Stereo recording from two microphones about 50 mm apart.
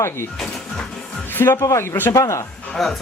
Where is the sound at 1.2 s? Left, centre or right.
Left.